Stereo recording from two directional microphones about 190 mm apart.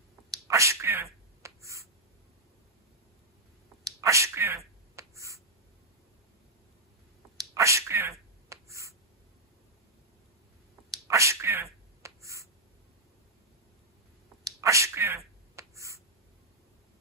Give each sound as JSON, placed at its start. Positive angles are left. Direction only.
{"t": 0.3, "sound": "a sound", "side_deg": -15}
{"t": 1.4, "sound": "writing", "side_deg": -15}
{"t": 3.8, "sound": "a sound", "side_deg": -15}
{"t": 4.9, "sound": "finger snapping", "side_deg": -15}
{"t": 7.3, "sound": "sneeze", "side_deg": -15}
{"t": 11.1, "sound": "sneeze", "side_deg": -15}
{"t": 14.4, "sound": "sneeze", "side_deg": -15}